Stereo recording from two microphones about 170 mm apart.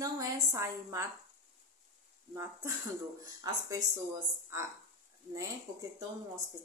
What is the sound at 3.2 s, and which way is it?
Speech, 20° right (ahead or behind).